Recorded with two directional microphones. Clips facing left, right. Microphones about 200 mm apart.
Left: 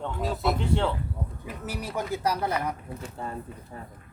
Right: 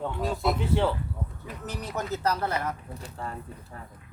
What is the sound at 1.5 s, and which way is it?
Speech, 10° left (ahead or behind).